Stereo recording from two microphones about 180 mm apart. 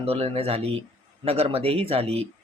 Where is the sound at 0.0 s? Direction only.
35° right (ahead or behind).